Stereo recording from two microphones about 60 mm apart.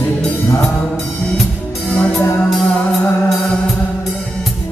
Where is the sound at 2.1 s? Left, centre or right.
Centre.